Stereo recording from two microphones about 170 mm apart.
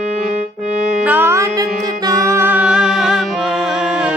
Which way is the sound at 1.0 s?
10° right (ahead or behind).